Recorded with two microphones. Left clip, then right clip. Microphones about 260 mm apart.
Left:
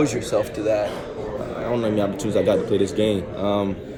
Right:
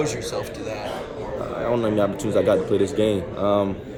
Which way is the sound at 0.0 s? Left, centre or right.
Left.